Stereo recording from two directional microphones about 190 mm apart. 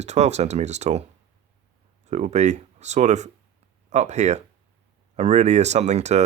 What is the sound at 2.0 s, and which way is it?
Speech, 40° right (ahead or behind).